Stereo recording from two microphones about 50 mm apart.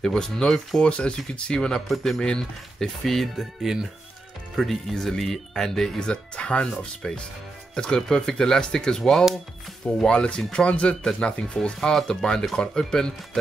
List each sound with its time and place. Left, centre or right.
0.0 s speech: centre
0.7 s speech: centre
1.9 s speech: centre
2.2 s speech: centre
3.1 s speech: centre
3.7 s speech: centre
4.6 s speech: centre
5.9 s speech: centre